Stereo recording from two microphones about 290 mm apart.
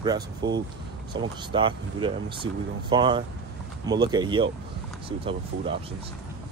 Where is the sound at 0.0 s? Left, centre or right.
Centre.